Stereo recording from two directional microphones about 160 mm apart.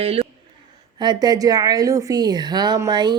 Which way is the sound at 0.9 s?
25° right (ahead or behind).